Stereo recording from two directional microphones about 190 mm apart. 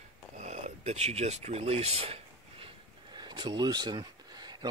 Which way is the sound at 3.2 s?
20° right (ahead or behind).